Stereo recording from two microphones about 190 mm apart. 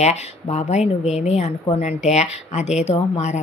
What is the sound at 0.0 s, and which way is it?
A woman's voice, 35° left (ahead or behind).